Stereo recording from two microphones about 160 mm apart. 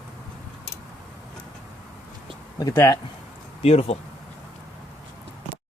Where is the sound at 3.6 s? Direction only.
40° left (ahead or behind).